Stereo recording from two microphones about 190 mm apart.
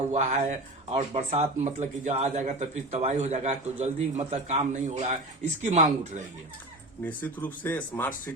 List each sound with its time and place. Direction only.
0.1 s speech: 35° right (ahead or behind)
7.0 s speech: 10° left (ahead or behind)